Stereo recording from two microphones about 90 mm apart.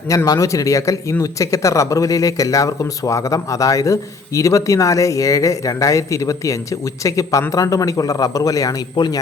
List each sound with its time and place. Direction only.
0.3 s speech: 35° left (ahead or behind)
9.0 s a man's voice: 60° left (ahead or behind)